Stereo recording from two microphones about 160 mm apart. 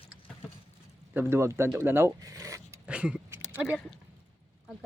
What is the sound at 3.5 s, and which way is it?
Speech, 10° right (ahead or behind).